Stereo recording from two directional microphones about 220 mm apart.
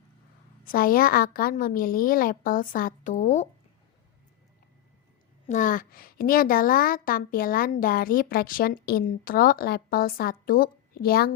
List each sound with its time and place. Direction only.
0.6 s a woman's voice: 40° left (ahead or behind)
5.5 s a woman's voice: 35° left (ahead or behind)